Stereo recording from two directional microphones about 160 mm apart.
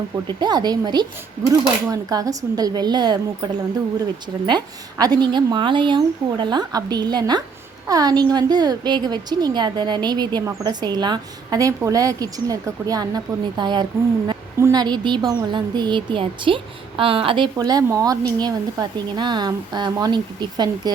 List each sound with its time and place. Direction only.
0.3 s a woman's voice: 25° right (ahead or behind)